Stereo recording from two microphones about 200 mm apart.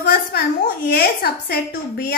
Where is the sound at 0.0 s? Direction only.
50° left (ahead or behind).